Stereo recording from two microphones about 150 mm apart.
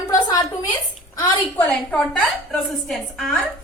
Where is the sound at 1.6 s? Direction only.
5° left (ahead or behind).